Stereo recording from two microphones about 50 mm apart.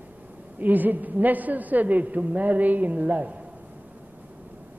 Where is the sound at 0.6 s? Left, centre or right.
Right.